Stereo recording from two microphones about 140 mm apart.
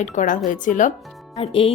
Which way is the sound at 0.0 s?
60° left (ahead or behind).